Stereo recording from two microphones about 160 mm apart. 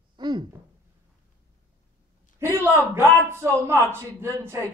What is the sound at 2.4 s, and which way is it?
Speech, 15° right (ahead or behind).